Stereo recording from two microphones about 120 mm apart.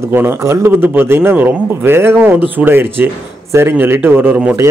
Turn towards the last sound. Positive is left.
turn(degrees=-15)  # may be behind; listen again after turning